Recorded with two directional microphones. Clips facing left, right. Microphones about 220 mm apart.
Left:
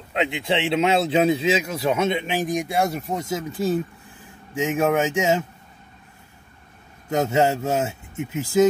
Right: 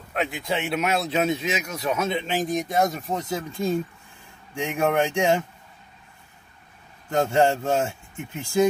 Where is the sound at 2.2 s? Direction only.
15° left (ahead or behind).